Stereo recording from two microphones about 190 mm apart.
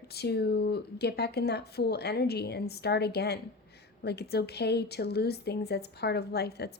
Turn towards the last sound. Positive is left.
turn(degrees=60)  # may be behind; listen again after turning